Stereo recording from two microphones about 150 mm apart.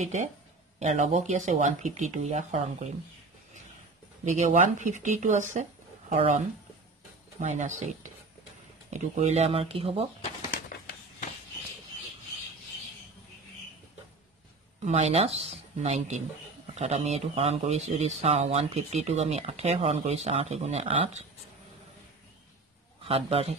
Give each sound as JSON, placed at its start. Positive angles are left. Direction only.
{"t": 0.0, "sound": "speech", "side_deg": -50}
{"t": 4.2, "sound": "speech", "side_deg": -55}
{"t": 14.9, "sound": "speech", "side_deg": -45}
{"t": 23.0, "sound": "a man's voice", "side_deg": -40}